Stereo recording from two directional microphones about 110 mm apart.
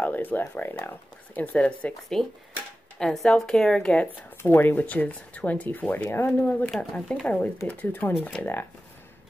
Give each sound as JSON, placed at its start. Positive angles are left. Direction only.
{"t": 0.0, "sound": "speech", "side_deg": 15}
{"t": 6.7, "sound": "speech", "side_deg": 5}